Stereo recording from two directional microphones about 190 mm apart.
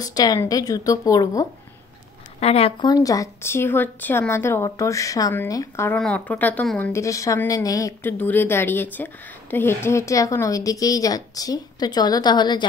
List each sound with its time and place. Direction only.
0.0 s speech: 20° left (ahead or behind)
2.4 s a woman's voice: 30° left (ahead or behind); by 5.9 s 15° left (ahead or behind)
5.9 s a woman's voice: 5° left (ahead or behind)
6.9 s a woman's voice: 15° left (ahead or behind)